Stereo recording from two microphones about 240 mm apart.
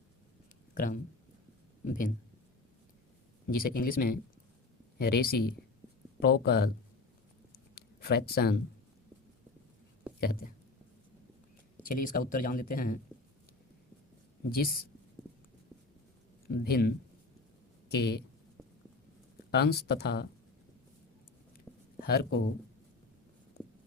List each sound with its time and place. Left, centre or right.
0.7 s speech: left
3.6 s speech: left
7.8 s a sound: left
10.2 s speech: left
11.9 s speech: left
14.5 s speech: left
16.5 s speech: left
17.9 s speech: left
19.5 s speech: left
22.0 s speech: left